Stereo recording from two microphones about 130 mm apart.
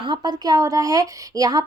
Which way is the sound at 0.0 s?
35° right (ahead or behind).